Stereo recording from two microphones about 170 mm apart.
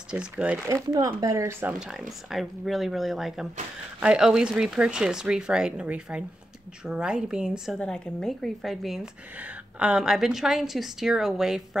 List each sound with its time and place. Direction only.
0.1 s speech: 5° right (ahead or behind)
0.9 s speech: 20° right (ahead or behind)
1.8 s a woman's voice: centre (ahead or behind)